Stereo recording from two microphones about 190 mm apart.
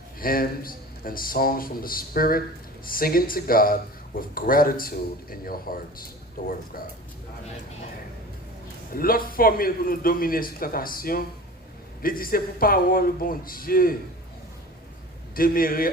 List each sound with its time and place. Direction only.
0.2 s speech: 50° left (ahead or behind)
8.9 s speech: 50° left (ahead or behind)
15.4 s speech: 50° left (ahead or behind)